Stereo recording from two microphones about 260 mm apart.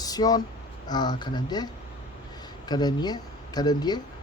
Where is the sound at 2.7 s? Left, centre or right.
Centre.